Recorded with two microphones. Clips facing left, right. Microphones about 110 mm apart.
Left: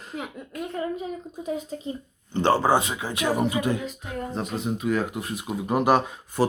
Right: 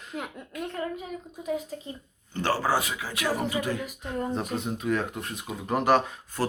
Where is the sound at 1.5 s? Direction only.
25° left (ahead or behind).